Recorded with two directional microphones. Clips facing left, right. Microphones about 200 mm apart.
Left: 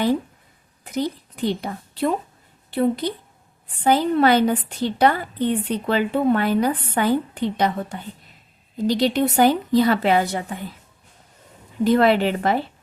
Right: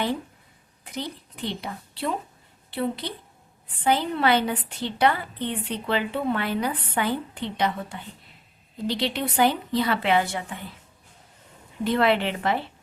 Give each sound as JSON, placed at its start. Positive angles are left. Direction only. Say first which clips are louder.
{"t": 0.9, "sound": "a woman's voice", "louder": "left 9 dB", "side_deg": 45}
{"t": 11.8, "sound": "a woman's voice", "louder": "left 5 dB", "side_deg": 40}